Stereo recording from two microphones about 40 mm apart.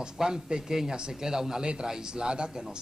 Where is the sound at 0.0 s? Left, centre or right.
Centre.